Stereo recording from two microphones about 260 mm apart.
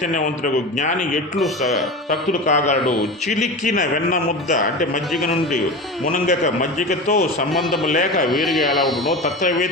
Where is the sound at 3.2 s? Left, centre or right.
Left.